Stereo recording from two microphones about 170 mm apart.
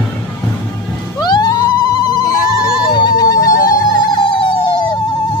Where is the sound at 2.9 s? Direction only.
25° left (ahead or behind).